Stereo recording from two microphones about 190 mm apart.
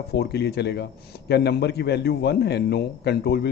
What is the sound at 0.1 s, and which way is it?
A man's voice, 60° left (ahead or behind).